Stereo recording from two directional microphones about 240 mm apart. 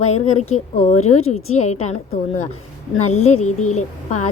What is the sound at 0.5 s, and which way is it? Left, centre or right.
A woman's voice, left.